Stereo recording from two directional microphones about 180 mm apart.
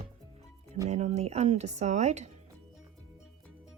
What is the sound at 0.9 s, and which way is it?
Speech, 40° right (ahead or behind).